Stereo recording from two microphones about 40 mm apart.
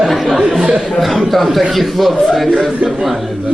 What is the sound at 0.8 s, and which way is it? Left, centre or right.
Speech, centre.